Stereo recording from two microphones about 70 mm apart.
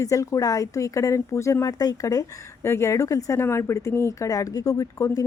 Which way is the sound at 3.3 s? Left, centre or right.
Left.